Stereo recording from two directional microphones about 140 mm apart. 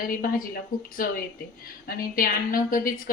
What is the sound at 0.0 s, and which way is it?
A woman's voice, 85° left.